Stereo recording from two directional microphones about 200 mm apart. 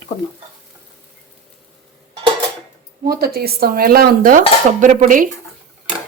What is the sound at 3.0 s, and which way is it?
Dishes, 50° right (ahead or behind).